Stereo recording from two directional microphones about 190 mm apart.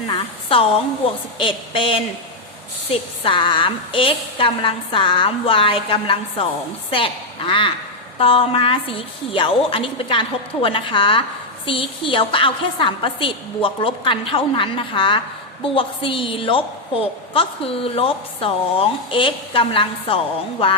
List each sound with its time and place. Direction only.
0.1 s a woman's voice: 30° left (ahead or behind)